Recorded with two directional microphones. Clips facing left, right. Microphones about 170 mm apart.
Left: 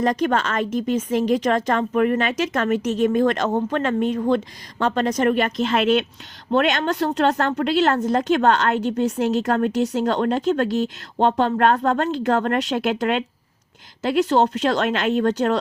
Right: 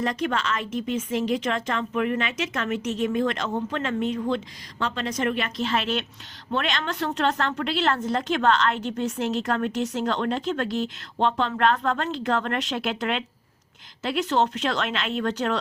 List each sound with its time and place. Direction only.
0.0 s a woman's voice: 45° left (ahead or behind)